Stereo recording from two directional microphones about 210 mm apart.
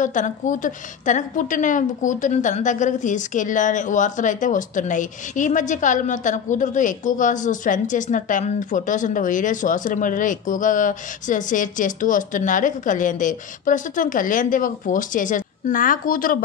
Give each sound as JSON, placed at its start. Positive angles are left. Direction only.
{"t": 0.0, "sound": "a woman's voice", "side_deg": 35}